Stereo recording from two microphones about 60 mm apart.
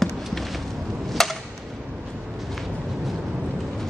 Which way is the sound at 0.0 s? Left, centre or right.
Centre.